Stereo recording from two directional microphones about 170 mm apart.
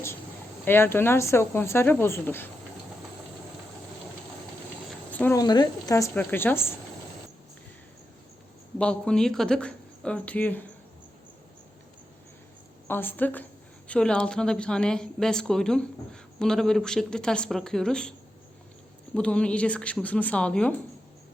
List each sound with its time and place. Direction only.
0.6 s speech: 15° left (ahead or behind)
5.1 s cricket: 10° left (ahead or behind)
5.4 s speech: 25° left (ahead or behind)
8.8 s speech: 5° left (ahead or behind)
12.9 s speech: 10° left (ahead or behind)
19.1 s speech: 5° left (ahead or behind)